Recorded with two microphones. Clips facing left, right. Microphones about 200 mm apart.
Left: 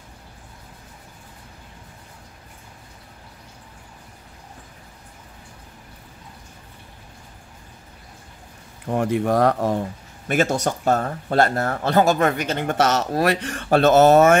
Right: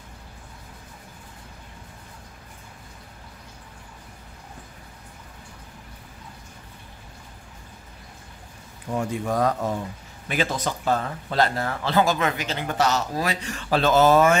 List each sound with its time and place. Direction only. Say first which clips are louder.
8.8 s speech: left 6 dB; 60° left (ahead or behind)
10.2 s a man's voice: left 5 dB; 50° left (ahead or behind)